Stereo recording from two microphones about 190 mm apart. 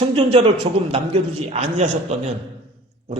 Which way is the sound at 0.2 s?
30° right (ahead or behind).